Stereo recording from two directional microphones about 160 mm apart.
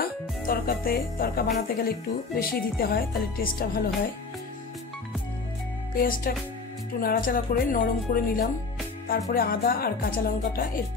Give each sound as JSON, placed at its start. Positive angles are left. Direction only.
{"t": 0.0, "sound": "music", "side_deg": 65}
{"t": 1.8, "sound": "speech", "side_deg": 70}
{"t": 5.9, "sound": "speech", "side_deg": 60}